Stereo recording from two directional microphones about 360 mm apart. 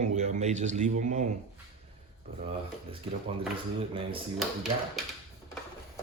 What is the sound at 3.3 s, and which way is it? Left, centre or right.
Speech, centre.